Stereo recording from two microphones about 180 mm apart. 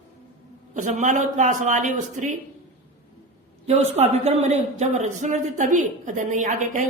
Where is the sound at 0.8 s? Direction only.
45° right (ahead or behind).